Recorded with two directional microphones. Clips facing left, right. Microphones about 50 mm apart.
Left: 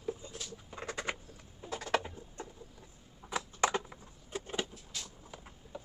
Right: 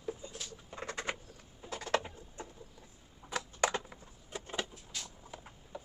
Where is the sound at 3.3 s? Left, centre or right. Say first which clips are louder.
Left 1 dB; centre.